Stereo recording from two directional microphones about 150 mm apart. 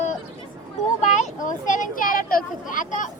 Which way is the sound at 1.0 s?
50° left (ahead or behind).